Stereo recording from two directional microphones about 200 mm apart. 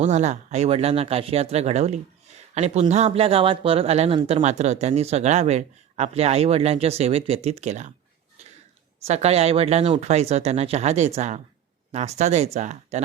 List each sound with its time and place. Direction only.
0.0 s speech: 35° right (ahead or behind)
9.0 s speech: 30° right (ahead or behind)